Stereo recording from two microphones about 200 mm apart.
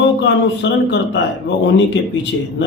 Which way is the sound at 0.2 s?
60° left (ahead or behind).